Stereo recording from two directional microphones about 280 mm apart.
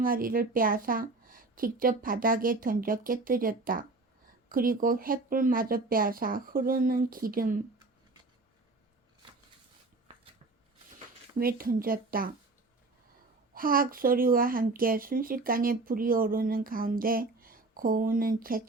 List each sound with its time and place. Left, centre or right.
0.0 s speech: right
11.3 s speech: right
13.5 s speech: right